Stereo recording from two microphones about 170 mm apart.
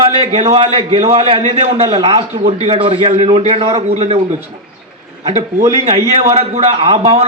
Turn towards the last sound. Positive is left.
turn(degrees=-35)  # may be behind; listen again after turning